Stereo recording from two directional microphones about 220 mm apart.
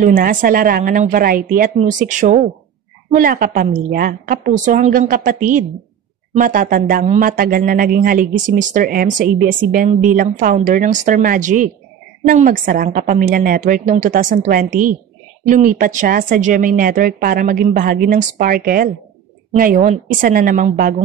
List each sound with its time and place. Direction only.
0.0 s speech: 40° right (ahead or behind)